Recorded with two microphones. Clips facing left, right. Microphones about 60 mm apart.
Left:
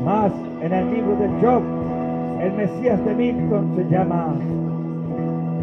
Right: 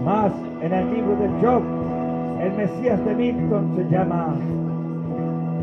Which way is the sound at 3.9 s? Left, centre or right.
Centre.